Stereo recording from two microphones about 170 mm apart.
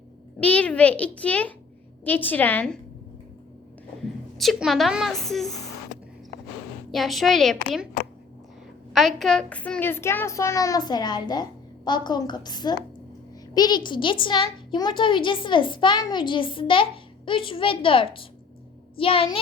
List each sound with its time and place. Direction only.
0.3 s a child's voice: 10° left (ahead or behind)
4.4 s a woman's voice: centre (ahead or behind)
6.9 s a woman's voice: centre (ahead or behind)
8.9 s a child's voice: centre (ahead or behind); by 19.4 s 35° left (ahead or behind)